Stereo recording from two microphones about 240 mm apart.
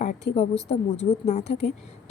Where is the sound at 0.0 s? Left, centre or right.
Left.